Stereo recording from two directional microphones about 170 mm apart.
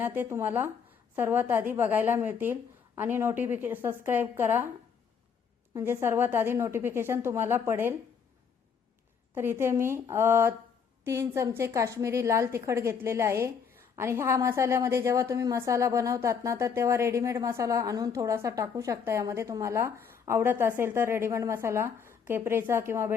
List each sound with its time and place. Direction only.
0.0 s a woman's voice: 10° right (ahead or behind)
5.7 s a woman's voice: 15° right (ahead or behind)
9.3 s a woman's voice: 15° right (ahead or behind)